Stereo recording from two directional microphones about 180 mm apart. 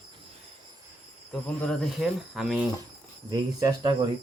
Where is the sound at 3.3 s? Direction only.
20° right (ahead or behind).